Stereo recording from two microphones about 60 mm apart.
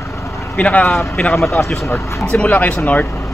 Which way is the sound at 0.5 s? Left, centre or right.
Left.